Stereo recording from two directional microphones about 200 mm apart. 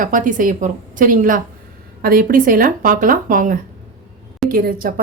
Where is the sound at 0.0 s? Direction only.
40° right (ahead or behind).